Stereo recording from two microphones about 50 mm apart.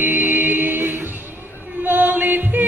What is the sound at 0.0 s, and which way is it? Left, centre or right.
Music, right.